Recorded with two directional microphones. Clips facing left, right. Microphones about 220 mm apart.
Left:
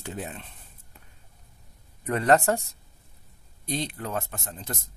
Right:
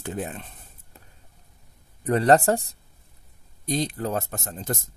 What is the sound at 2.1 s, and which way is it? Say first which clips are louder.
Speech: right 3 dB; 35° right (ahead or behind).